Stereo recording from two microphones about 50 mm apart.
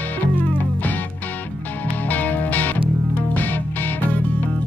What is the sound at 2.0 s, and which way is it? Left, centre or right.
Music, left.